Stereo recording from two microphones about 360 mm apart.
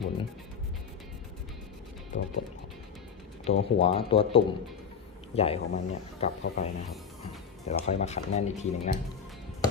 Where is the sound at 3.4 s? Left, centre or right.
Centre.